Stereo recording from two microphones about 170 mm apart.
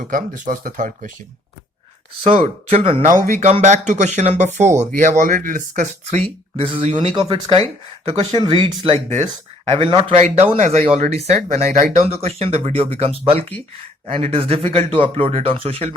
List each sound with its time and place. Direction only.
0.1 s speech: 50° right (ahead or behind)
2.2 s speech: 40° right (ahead or behind)
3.1 s speech: 50° right (ahead or behind)
6.6 s speech: 35° right (ahead or behind)